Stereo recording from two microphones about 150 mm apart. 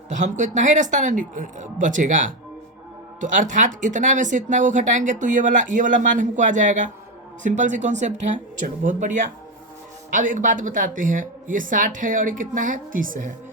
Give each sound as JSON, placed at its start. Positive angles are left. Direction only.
{"t": 0.1, "sound": "speech", "side_deg": -55}